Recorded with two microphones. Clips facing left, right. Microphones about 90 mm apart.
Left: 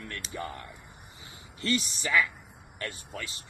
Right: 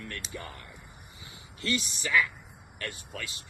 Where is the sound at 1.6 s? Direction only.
35° left (ahead or behind).